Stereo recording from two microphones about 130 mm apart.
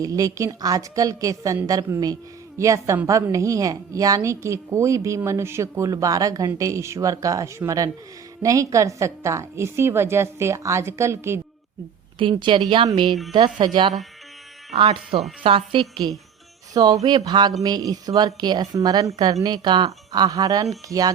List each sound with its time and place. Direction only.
0.0 s a woman's voice: 25° right (ahead or behind)
12.2 s speech: 40° right (ahead or behind)
16.7 s a woman's voice: 30° right (ahead or behind)